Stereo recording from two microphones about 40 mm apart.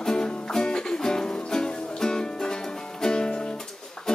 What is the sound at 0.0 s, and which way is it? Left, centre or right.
Music, centre.